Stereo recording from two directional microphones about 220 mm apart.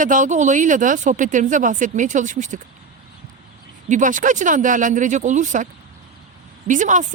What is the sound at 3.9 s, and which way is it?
Speech, 35° right (ahead or behind).